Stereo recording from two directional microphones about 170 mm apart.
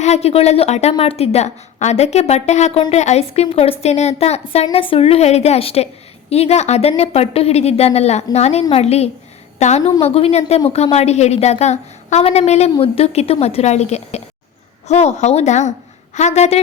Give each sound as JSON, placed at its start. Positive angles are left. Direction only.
{"t": 0.0, "sound": "a woman's voice", "side_deg": 40}